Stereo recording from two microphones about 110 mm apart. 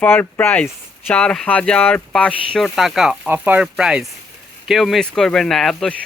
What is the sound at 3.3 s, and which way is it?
Speech, 15° right (ahead or behind).